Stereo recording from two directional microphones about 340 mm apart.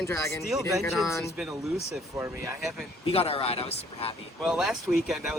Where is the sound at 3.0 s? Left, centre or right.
Centre.